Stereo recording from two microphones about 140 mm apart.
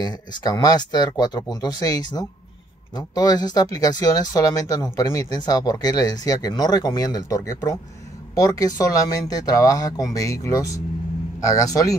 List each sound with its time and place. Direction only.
0.0 s speech: 30° left (ahead or behind)